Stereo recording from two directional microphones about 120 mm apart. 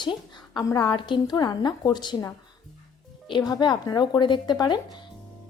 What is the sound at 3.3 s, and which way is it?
A woman's voice, 35° left (ahead or behind).